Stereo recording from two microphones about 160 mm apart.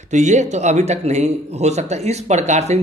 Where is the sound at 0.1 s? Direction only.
45° right (ahead or behind).